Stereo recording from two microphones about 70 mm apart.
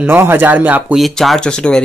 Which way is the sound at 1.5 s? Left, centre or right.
Centre.